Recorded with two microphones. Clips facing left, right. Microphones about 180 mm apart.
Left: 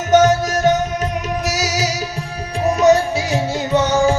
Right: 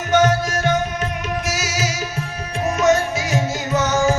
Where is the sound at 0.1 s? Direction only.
40° left (ahead or behind).